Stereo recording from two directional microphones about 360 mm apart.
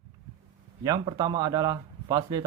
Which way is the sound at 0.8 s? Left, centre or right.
Centre.